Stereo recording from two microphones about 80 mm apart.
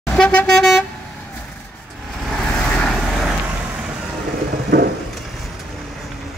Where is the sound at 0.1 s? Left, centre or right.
Centre.